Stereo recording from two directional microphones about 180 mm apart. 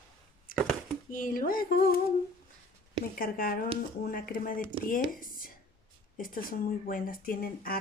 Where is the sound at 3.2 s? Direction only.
55° left (ahead or behind).